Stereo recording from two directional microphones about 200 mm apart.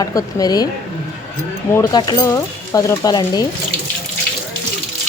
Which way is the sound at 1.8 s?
20° left (ahead or behind).